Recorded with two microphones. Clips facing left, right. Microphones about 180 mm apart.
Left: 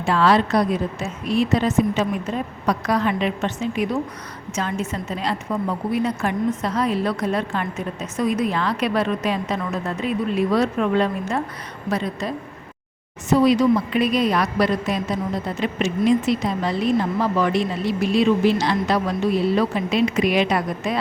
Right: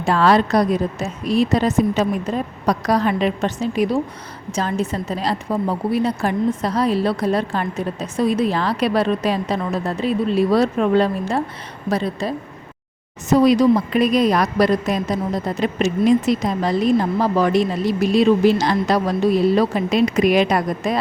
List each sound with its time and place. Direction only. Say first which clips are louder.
0.0 s a woman's voice: right 2 dB; 45° right (ahead or behind)
13.3 s a woman's voice: right 3 dB; 40° right (ahead or behind)